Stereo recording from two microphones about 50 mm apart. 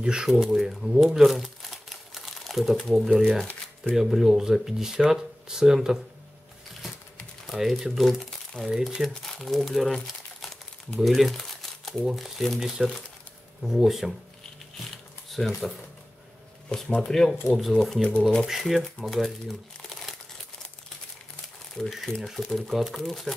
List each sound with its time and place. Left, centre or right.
0.0 s speech: centre
0.3 s speech: centre
1.4 s crumpling: centre
3.0 s speech: centre
3.9 s speech: centre
7.4 s speech: centre
8.6 s speech: centre
9.2 s speech: centre
11.0 s speech: centre
12.5 s speech: centre
15.2 s speech: centre
16.6 s speech: centre
22.1 s speech: centre